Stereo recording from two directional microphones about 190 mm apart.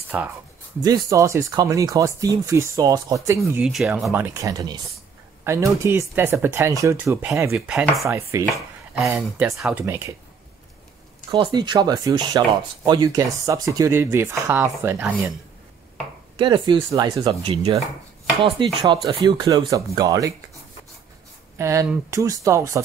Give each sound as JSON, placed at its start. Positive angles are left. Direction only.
{"t": 0.1, "sound": "speech", "side_deg": -5}
{"t": 0.8, "sound": "speech", "side_deg": -20}
{"t": 3.3, "sound": "speech", "side_deg": 0}
{"t": 11.3, "sound": "speech", "side_deg": -25}
{"t": 16.3, "sound": "speech", "side_deg": -25}
{"t": 21.5, "sound": "speech", "side_deg": -15}